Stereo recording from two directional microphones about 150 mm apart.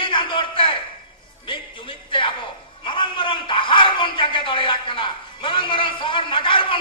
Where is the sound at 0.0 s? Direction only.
35° left (ahead or behind).